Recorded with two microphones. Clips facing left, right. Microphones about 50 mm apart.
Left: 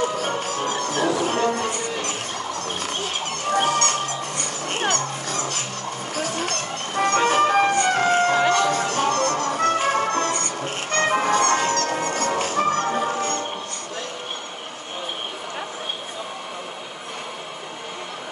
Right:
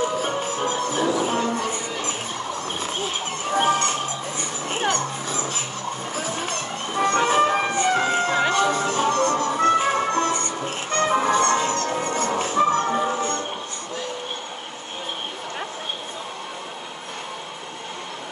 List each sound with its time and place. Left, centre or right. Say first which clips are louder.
0.1 s music: even; centre
1.5 s a sound: left 1 dB; centre
6.1 s music: left 4 dB; centre
11.0 s music: even; left
11.2 s music: even; centre